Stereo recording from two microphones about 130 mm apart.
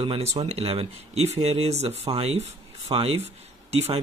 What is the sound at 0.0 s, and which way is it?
Speech, 40° right (ahead or behind).